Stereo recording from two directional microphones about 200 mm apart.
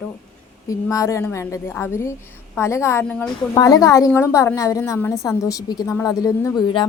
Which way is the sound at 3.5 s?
15° left (ahead or behind).